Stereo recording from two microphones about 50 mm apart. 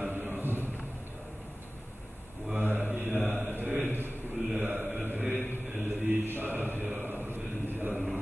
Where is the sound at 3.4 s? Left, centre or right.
Right.